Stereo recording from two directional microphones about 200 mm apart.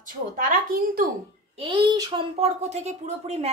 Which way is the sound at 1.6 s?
25° right (ahead or behind).